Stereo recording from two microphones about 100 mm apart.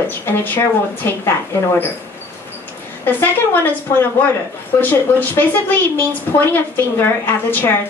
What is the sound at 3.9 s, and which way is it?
Speech, 30° left (ahead or behind).